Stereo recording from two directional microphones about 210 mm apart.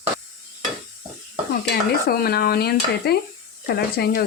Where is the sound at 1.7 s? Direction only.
45° left (ahead or behind).